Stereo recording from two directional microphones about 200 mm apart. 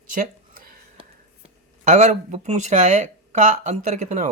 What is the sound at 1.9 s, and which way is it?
Speech, 35° right (ahead or behind).